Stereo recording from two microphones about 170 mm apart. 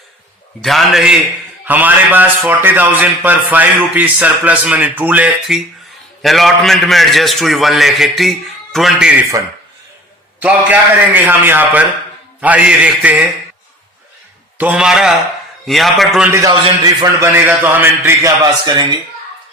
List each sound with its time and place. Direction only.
0.6 s a man's voice: centre (ahead or behind)
10.4 s a man's voice: 10° right (ahead or behind)
14.6 s a man's voice: 5° right (ahead or behind)
16.5 s a man's voice: 25° right (ahead or behind)
17.2 s a man's voice: 10° right (ahead or behind)